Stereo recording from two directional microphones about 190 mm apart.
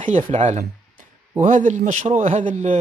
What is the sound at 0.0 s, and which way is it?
A man's voice, 40° right (ahead or behind).